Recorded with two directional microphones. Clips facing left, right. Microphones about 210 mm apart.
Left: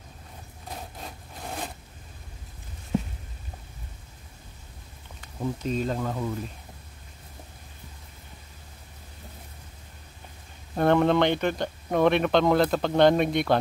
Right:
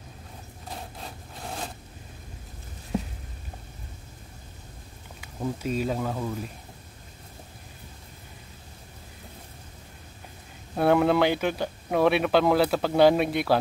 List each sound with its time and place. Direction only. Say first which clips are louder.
1.0 s sawing: even; 5° left (ahead or behind)
5.2 s speech: even; 10° right (ahead or behind)
10.8 s speech: even; 5° right (ahead or behind)